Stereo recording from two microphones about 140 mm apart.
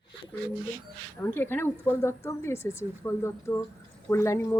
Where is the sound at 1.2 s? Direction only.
15° left (ahead or behind).